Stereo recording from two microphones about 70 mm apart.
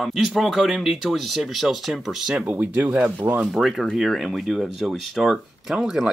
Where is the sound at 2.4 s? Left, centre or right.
Right.